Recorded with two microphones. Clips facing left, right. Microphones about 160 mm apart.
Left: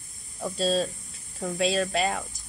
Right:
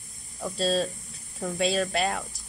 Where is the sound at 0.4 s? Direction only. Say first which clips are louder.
Left 1 dB; centre (ahead or behind).